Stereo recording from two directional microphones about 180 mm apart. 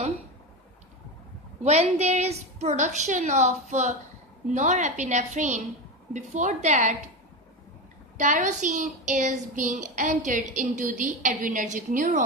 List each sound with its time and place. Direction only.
1.6 s a woman's voice: 40° right (ahead or behind)
8.2 s a child's voice: 45° right (ahead or behind)